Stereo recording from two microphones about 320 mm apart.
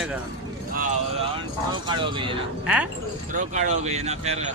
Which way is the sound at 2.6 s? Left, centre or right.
Centre.